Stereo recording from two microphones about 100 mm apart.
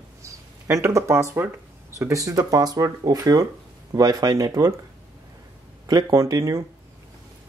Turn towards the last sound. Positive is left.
turn(degrees=-35)  # may be behind; listen again after turning